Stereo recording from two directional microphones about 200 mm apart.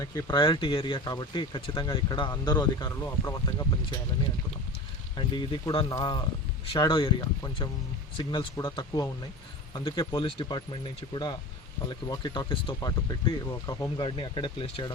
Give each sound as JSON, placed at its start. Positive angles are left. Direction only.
{"t": 0.0, "sound": "speech", "side_deg": 20}
{"t": 5.1, "sound": "speech", "side_deg": 25}